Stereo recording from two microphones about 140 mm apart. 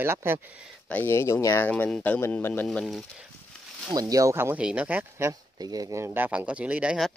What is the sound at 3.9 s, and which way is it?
Speech, 25° right (ahead or behind).